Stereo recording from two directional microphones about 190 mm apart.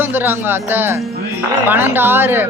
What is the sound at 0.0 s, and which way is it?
Speech, 10° right (ahead or behind).